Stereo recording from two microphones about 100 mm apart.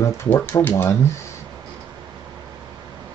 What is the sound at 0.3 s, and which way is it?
Speech, 20° left (ahead or behind).